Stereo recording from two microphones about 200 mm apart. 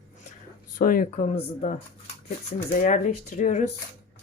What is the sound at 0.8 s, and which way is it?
Speech, 40° left (ahead or behind).